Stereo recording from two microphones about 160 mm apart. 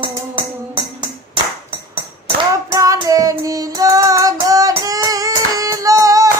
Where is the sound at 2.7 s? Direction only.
20° right (ahead or behind).